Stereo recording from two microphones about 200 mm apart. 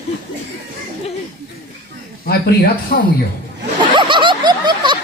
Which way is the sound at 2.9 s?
50° left (ahead or behind).